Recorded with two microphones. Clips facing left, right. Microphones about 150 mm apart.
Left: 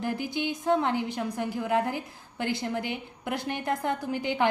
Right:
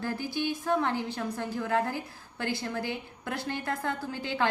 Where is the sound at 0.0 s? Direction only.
20° left (ahead or behind).